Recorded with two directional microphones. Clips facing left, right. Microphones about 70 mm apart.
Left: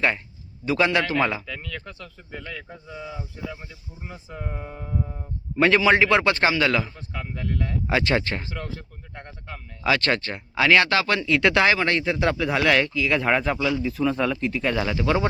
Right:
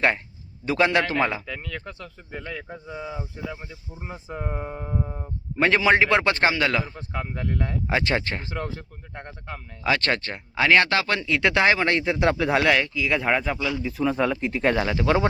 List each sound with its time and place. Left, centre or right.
0.6 s a man's voice: right
0.9 s speech: right
1.5 s speech: right
12.6 s speech: centre
14.6 s speech: right